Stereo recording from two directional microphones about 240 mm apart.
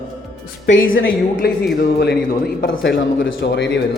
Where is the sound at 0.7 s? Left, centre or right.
Left.